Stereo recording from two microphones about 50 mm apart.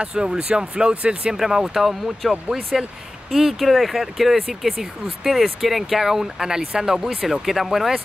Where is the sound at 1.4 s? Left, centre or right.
Centre.